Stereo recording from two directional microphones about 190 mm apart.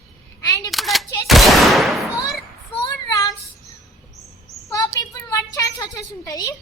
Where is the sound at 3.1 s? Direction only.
15° left (ahead or behind).